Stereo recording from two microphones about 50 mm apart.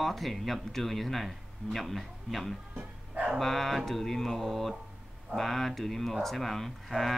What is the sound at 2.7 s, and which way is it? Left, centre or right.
Music, right.